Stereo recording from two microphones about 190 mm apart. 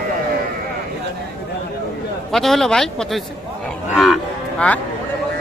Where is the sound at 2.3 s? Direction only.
Centre (ahead or behind).